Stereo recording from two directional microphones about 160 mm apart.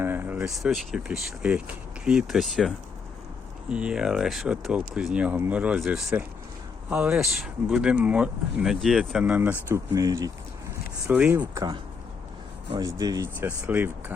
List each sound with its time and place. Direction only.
0.0 s a sound: 15° right (ahead or behind)
0.6 s speech: centre (ahead or behind)
12.8 s speech: 20° right (ahead or behind)